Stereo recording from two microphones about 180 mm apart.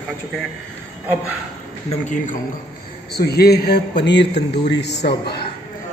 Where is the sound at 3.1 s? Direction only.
60° left (ahead or behind).